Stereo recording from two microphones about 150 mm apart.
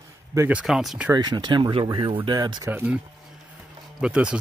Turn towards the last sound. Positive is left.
turn(degrees=-5)  # may be behind; listen again after turning